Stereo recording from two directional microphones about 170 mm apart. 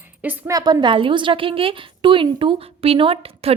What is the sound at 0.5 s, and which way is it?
A woman's voice, 25° right (ahead or behind).